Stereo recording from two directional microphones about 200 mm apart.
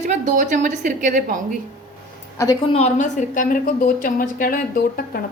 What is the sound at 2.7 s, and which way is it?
A woman's voice, 35° left (ahead or behind).